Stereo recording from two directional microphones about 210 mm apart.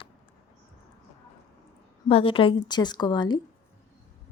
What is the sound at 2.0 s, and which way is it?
A woman's voice, 25° left (ahead or behind).